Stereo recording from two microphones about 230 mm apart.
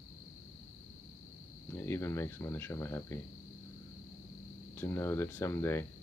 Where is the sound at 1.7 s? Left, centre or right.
Centre.